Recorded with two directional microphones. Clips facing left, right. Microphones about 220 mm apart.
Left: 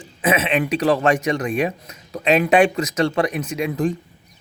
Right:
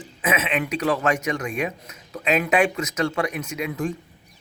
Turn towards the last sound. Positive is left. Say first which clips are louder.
# left 5 dB
turn(degrees=35)  # may be behind; listen again after turning